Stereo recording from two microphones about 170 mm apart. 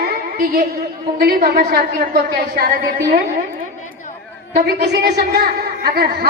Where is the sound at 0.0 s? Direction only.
65° right (ahead or behind).